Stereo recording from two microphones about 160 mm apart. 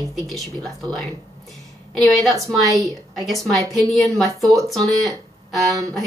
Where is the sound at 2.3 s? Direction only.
20° right (ahead or behind).